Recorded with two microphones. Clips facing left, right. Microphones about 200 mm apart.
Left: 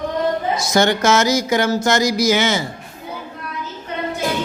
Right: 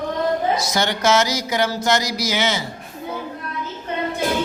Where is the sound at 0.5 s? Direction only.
50° left (ahead or behind).